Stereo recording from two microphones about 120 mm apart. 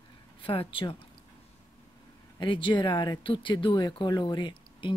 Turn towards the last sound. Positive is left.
turn(degrees=40)  # may be behind; listen again after turning